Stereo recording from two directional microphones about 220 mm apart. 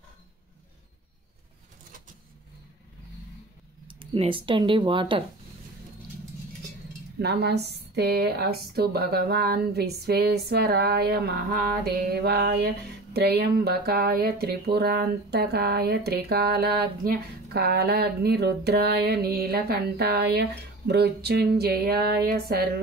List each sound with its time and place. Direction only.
3.8 s speech: 25° right (ahead or behind)
7.2 s speech: 50° right (ahead or behind)